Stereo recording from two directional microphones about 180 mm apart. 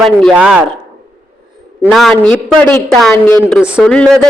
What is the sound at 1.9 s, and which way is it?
A woman's voice, centre (ahead or behind).